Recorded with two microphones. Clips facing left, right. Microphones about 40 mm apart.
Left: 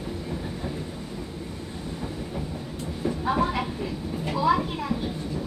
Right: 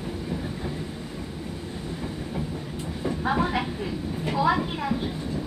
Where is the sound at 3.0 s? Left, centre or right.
Centre.